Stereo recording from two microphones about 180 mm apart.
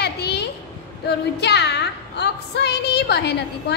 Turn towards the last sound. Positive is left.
turn(degrees=65)  # may be behind; listen again after turning